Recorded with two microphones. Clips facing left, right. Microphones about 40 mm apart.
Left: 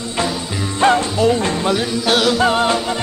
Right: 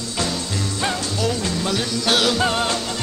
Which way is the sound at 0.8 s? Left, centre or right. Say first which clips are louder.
Left 11 dB; left.